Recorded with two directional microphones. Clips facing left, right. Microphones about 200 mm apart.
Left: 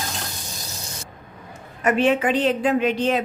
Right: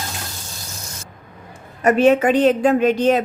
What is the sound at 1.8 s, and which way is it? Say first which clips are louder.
A woman's voice: right 5 dB; 40° right (ahead or behind).